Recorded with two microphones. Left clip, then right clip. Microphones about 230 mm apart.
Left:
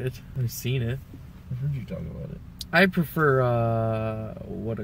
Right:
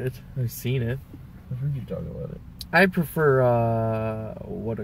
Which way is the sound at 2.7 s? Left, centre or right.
Centre.